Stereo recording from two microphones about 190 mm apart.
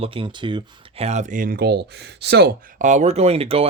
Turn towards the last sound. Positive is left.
turn(degrees=-30)  # may be behind; listen again after turning